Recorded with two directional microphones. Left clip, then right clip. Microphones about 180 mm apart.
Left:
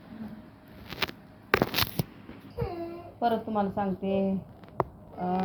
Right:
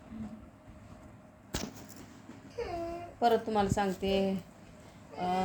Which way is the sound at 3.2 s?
20° right (ahead or behind).